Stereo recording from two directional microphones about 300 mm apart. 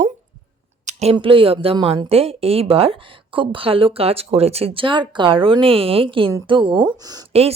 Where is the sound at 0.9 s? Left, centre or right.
Right.